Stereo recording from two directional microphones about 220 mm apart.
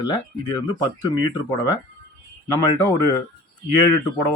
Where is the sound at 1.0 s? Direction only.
15° left (ahead or behind).